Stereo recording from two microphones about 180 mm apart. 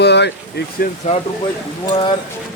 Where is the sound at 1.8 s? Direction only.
30° left (ahead or behind).